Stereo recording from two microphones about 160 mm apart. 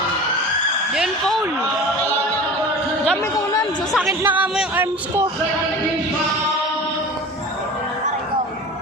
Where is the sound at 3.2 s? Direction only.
20° left (ahead or behind).